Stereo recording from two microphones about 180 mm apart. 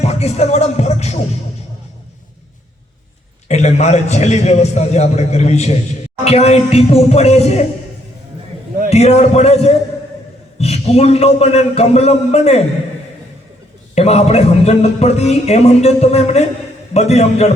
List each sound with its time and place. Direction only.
0.0 s music: 35° left (ahead or behind)
3.5 s a man's voice: 40° left (ahead or behind)
8.9 s a man's voice: 35° left (ahead or behind)
13.9 s a man's voice: 35° left (ahead or behind)